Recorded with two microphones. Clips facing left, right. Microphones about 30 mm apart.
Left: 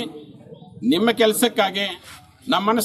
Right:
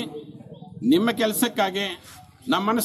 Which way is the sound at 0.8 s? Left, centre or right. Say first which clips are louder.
Left 3 dB; left.